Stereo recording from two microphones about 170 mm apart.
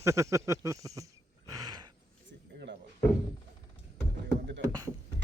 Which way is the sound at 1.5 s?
20° right (ahead or behind).